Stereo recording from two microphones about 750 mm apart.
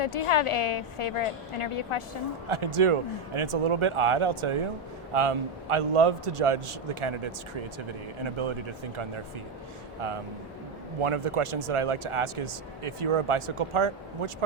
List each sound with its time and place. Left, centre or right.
0.0 s a woman's voice: left
2.5 s speech: right
11.0 s speech: right